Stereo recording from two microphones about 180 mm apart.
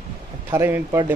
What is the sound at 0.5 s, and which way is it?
Speech, 15° right (ahead or behind).